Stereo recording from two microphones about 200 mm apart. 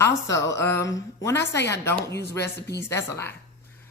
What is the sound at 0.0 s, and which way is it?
A woman's voice, 15° left (ahead or behind).